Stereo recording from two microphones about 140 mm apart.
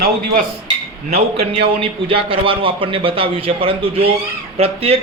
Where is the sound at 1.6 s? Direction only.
40° right (ahead or behind).